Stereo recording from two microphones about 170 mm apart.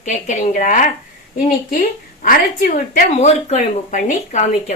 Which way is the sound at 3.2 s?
45° left (ahead or behind).